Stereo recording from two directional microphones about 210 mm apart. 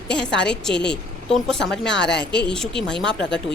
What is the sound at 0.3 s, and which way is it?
Speech, 5° left (ahead or behind).